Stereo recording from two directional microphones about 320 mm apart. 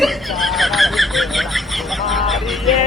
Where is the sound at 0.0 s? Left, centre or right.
Centre.